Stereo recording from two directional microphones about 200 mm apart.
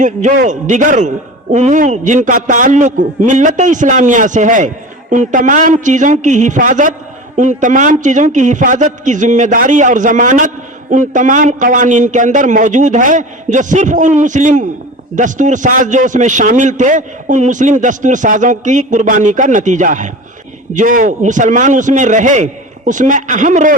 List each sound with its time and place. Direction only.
0.0 s a man's voice: 40° right (ahead or behind)